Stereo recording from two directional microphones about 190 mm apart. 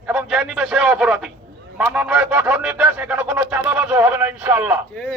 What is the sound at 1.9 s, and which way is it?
Speech, 5° right (ahead or behind).